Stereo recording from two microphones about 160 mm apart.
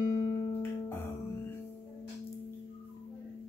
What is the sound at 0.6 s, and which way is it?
Music, 15° left (ahead or behind).